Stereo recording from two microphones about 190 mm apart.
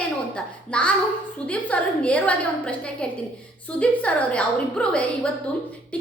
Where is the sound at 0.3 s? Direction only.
5° left (ahead or behind).